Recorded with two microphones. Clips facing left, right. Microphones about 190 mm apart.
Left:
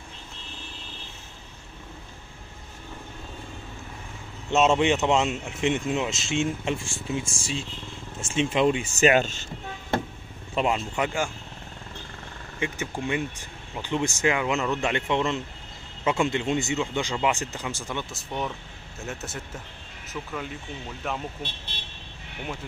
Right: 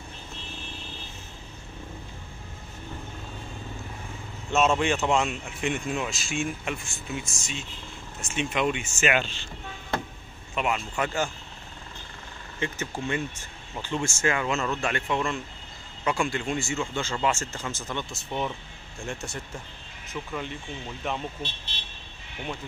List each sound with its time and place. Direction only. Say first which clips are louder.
4.5 s speech: left 3 dB; 20° left (ahead or behind); by 9.5 s 45° left (ahead or behind)
10.5 s speech: left 3 dB; 30° left (ahead or behind)
12.5 s speech: left 1 dB; 15° left (ahead or behind)
18.1 s speech: right 1 dB; centre (ahead or behind)